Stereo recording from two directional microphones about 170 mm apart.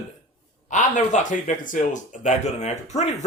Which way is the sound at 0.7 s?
45° left (ahead or behind).